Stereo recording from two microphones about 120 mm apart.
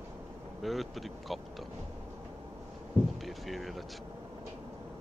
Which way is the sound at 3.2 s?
Centre (ahead or behind).